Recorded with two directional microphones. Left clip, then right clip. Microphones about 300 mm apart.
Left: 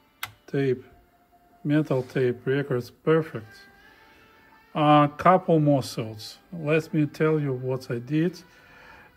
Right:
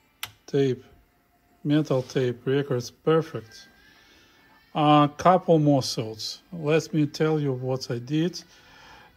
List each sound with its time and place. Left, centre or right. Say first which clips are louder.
0.5 s speech: right 2 dB; centre
2.2 s speech: even; right
2.8 s speech: even; centre
4.7 s speech: even; centre